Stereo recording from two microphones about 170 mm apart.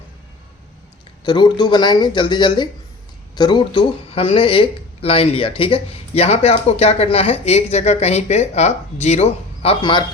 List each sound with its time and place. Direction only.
1.2 s speech: 25° left (ahead or behind)